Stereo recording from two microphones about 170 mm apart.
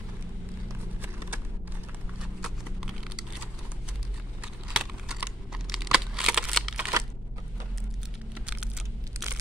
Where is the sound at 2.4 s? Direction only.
5° right (ahead or behind).